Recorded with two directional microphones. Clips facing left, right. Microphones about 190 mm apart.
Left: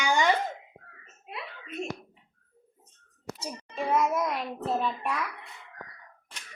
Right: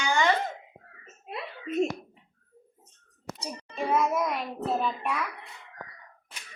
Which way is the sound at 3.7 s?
Centre (ahead or behind).